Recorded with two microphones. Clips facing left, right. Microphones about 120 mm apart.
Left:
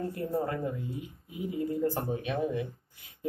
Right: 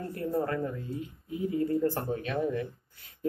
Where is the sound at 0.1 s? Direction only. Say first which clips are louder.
Right 1 dB; 20° left (ahead or behind).